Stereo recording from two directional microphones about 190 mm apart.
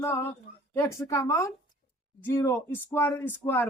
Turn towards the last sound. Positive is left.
turn(degrees=10)  # may be behind; listen again after turning